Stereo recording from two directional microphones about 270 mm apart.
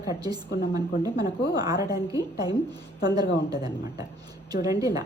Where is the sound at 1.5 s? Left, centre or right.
Centre.